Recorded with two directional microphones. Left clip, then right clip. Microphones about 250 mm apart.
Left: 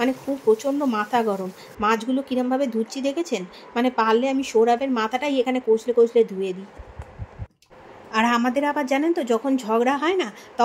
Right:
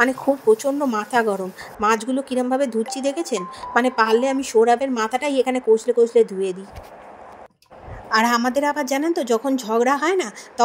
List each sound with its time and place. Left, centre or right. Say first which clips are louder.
0.0 s speech: right 5 dB; right
8.1 s speech: right 3 dB; right